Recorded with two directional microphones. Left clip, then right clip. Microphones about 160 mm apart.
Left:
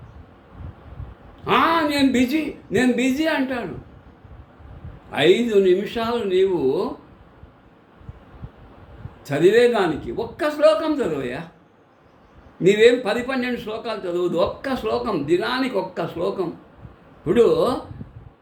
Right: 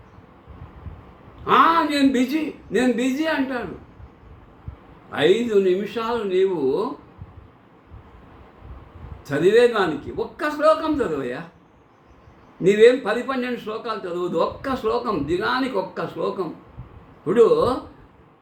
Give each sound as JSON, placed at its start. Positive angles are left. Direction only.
{"t": 1.5, "sound": "a man's voice", "side_deg": 15}
{"t": 5.1, "sound": "a man's voice", "side_deg": 15}
{"t": 9.2, "sound": "a man's voice", "side_deg": 15}
{"t": 12.6, "sound": "a man's voice", "side_deg": 15}
{"t": 17.2, "sound": "a man's voice", "side_deg": 15}